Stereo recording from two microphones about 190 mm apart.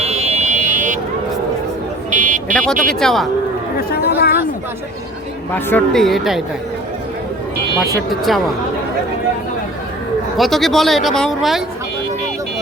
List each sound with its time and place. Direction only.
0.0 s buzzer: 35° right (ahead or behind)
2.0 s buzzer: 40° right (ahead or behind)
2.5 s speech: 5° left (ahead or behind)
3.8 s chatter: 55° left (ahead or behind)
5.5 s speech: 10° left (ahead or behind)
8.3 s speech: centre (ahead or behind)
10.3 s speech: centre (ahead or behind)